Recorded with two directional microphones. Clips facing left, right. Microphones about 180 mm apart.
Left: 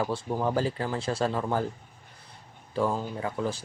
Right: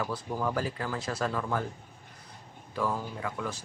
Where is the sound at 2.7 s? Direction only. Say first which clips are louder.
Left 4 dB; 25° left (ahead or behind).